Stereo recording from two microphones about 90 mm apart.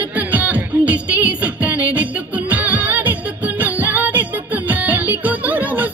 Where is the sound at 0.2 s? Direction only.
15° right (ahead or behind).